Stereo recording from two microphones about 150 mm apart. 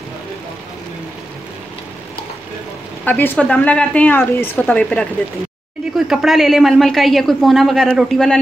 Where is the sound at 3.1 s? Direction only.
10° left (ahead or behind).